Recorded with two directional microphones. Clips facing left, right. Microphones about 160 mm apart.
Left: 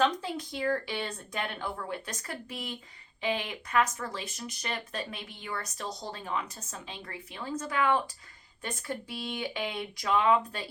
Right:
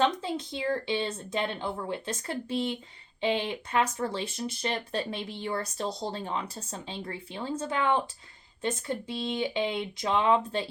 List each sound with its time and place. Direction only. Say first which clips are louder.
0.0 s speech: right 1 dB; 25° right (ahead or behind)